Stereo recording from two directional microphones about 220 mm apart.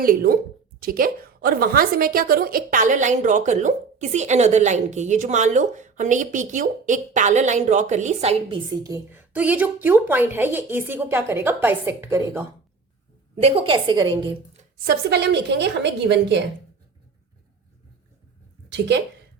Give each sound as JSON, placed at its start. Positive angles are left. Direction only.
{"t": 0.0, "sound": "a woman's voice", "side_deg": -40}
{"t": 13.3, "sound": "a woman's voice", "side_deg": -25}
{"t": 14.8, "sound": "a woman's voice", "side_deg": -50}
{"t": 18.7, "sound": "a woman's voice", "side_deg": -50}